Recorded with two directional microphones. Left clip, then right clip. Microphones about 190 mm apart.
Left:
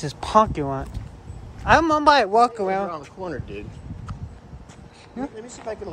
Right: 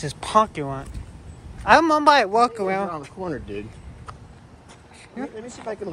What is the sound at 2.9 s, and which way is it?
Speech, 40° right (ahead or behind).